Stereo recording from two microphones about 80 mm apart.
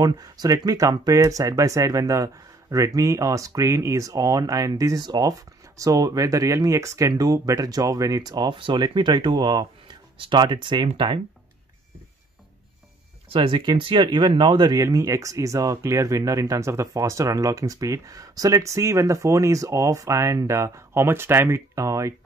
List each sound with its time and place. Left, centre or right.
0.0 s speech: right
13.4 s speech: right
14.8 s speech: right